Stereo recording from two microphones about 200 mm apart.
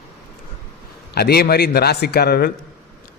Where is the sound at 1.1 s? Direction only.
50° left (ahead or behind).